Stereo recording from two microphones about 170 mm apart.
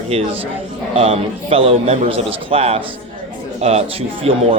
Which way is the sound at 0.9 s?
35° right (ahead or behind).